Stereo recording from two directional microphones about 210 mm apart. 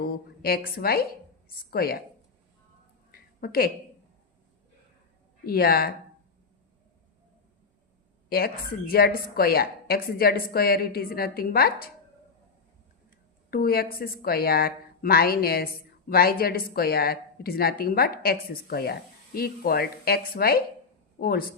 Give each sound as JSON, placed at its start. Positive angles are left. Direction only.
{"t": 0.0, "sound": "a woman's voice", "side_deg": 45}
{"t": 3.1, "sound": "a sound", "side_deg": 45}
{"t": 5.5, "sound": "a woman's voice", "side_deg": 45}
{"t": 8.3, "sound": "a woman's voice", "side_deg": 45}
{"t": 13.5, "sound": "a woman's voice", "side_deg": 45}